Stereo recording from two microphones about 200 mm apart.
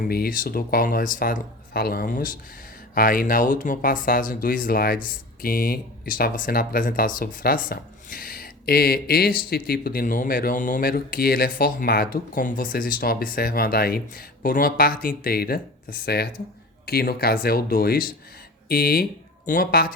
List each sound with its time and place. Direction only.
0.1 s speech: 45° left (ahead or behind)